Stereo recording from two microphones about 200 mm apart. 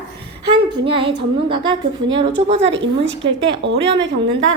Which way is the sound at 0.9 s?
25° right (ahead or behind).